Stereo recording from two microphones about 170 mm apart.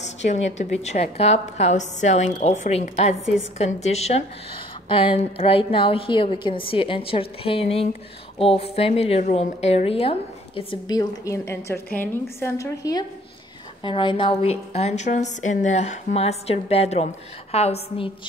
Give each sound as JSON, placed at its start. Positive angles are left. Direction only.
{"t": 0.0, "sound": "a woman's voice", "side_deg": 40}
{"t": 11.0, "sound": "a woman's voice", "side_deg": 20}
{"t": 13.8, "sound": "a woman's voice", "side_deg": 30}